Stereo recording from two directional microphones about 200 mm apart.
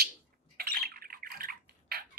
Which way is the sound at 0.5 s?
50° right (ahead or behind).